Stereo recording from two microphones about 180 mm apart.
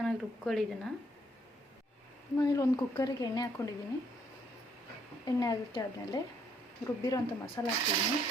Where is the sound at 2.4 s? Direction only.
20° left (ahead or behind).